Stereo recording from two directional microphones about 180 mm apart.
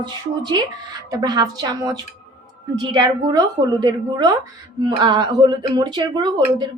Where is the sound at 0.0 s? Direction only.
25° right (ahead or behind).